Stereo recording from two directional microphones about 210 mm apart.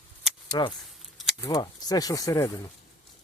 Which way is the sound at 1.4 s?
15° left (ahead or behind).